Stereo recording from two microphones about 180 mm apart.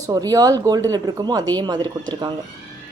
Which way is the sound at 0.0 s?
20° right (ahead or behind).